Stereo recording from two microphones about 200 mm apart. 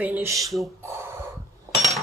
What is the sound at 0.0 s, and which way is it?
Speech, 10° right (ahead or behind).